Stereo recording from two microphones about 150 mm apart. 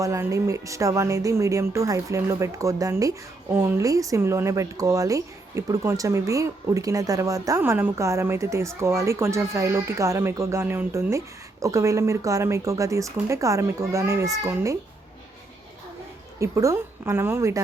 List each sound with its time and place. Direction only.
0.0 s speech: 20° right (ahead or behind)
16.4 s speech: 20° right (ahead or behind)